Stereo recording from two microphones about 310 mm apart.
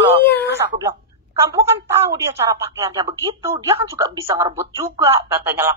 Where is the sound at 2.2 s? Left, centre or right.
Centre.